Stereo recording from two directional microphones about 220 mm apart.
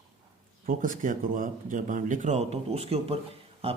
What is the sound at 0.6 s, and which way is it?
Speech, 40° right (ahead or behind).